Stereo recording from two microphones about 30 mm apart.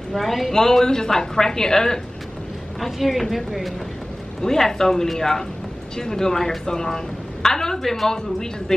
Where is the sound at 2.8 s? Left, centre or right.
Centre.